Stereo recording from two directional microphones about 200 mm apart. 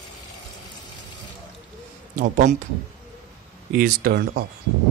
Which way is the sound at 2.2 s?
40° right (ahead or behind).